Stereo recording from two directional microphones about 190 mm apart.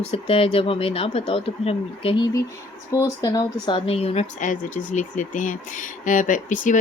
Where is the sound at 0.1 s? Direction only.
30° left (ahead or behind).